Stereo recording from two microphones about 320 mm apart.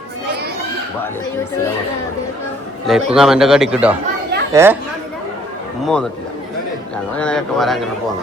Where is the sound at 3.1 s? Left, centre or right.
Centre.